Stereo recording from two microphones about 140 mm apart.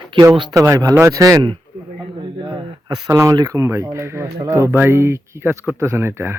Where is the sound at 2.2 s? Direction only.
35° right (ahead or behind).